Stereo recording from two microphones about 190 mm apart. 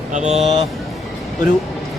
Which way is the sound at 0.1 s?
40° right (ahead or behind).